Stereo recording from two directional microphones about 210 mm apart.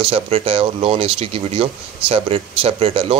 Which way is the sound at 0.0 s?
25° right (ahead or behind).